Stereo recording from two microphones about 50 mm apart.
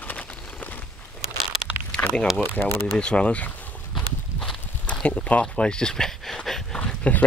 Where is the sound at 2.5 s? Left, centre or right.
Left.